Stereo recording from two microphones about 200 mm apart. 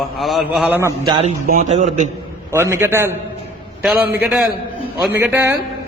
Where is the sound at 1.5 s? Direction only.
35° right (ahead or behind).